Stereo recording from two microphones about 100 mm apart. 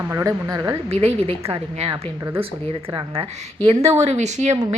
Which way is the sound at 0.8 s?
80° right.